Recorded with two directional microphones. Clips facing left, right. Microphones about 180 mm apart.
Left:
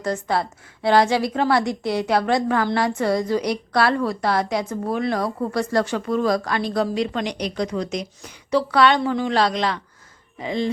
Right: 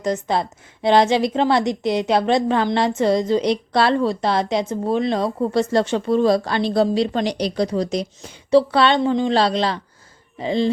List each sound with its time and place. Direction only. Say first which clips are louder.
0.0 s a woman's voice: right 2 dB; 20° right (ahead or behind)